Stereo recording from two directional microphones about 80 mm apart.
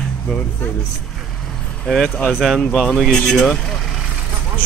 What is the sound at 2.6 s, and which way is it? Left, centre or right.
Speech, centre.